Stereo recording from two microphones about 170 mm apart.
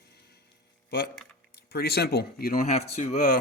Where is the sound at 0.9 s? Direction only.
75° left (ahead or behind); by 3.3 s 45° left (ahead or behind).